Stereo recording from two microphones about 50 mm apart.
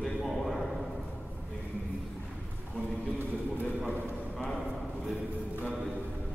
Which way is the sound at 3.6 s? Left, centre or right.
Right.